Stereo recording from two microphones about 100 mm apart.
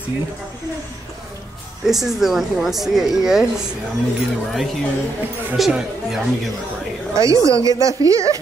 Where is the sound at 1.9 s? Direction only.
Centre (ahead or behind).